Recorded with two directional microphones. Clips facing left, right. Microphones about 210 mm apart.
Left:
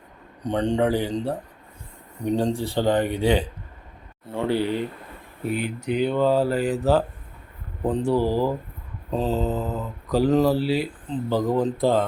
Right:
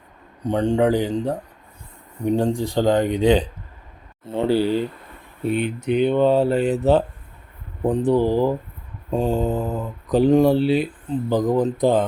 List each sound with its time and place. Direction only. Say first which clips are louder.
0.4 s speech: right 3 dB; 10° right (ahead or behind)